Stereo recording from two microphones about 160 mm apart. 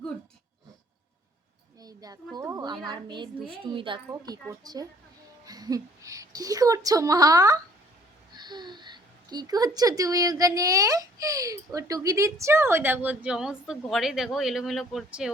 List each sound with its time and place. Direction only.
1.8 s a sound: 25° right (ahead or behind)
2.9 s a woman's voice: 30° right (ahead or behind)
4.1 s a woman's voice: 20° right (ahead or behind); by 15.3 s centre (ahead or behind)